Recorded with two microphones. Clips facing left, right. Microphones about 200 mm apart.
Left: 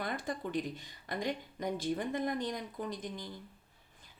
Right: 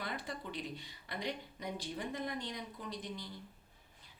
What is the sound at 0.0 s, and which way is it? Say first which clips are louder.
A woman's voice: left 5 dB; 50° left (ahead or behind).